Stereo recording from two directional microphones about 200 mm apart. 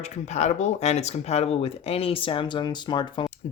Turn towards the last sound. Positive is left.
turn(degrees=20)  # may be behind; listen again after turning